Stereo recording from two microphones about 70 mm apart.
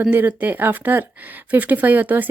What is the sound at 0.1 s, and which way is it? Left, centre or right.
Speech, right.